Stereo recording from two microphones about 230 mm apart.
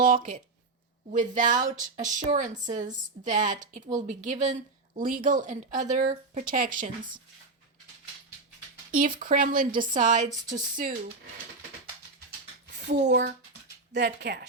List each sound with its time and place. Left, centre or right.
0.0 s speech: right
9.0 s speech: right
13.0 s speech: right